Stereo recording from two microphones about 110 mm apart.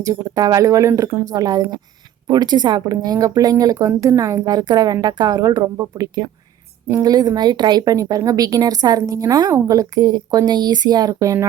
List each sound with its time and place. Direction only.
0.0 s speech: 30° right (ahead or behind)